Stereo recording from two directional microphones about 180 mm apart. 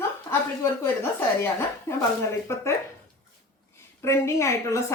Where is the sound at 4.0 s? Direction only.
15° left (ahead or behind).